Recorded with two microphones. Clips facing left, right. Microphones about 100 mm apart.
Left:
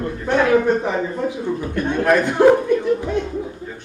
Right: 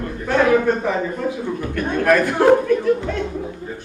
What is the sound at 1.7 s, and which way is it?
Speech, 20° left (ahead or behind).